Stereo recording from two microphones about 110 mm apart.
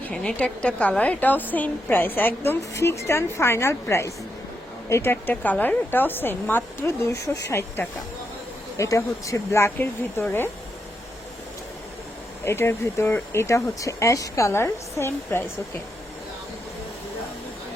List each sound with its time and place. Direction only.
0.0 s a woman's voice: 10° left (ahead or behind)
12.5 s speech: 20° left (ahead or behind)